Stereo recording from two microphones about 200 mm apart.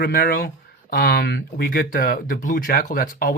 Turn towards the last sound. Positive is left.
turn(degrees=45)  # may be behind; listen again after turning